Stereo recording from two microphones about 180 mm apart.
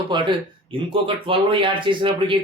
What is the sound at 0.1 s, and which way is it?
Speech, 25° right (ahead or behind).